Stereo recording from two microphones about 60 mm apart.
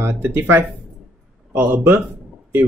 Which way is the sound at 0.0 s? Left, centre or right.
Right.